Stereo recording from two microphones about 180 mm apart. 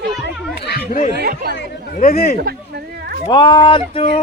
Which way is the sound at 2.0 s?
50° left (ahead or behind).